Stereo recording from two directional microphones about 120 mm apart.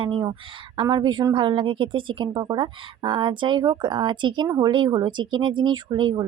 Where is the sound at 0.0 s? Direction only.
45° right (ahead or behind).